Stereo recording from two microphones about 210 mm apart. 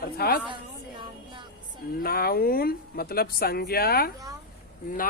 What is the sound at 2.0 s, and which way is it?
A woman's voice, 45° left (ahead or behind).